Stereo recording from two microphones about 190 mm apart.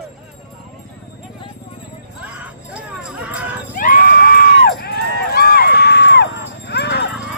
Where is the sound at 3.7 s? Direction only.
45° left (ahead or behind).